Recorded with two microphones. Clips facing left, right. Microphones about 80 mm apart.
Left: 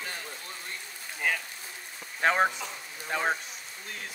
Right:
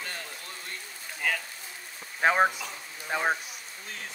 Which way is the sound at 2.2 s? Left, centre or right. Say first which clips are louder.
Right 2 dB; centre.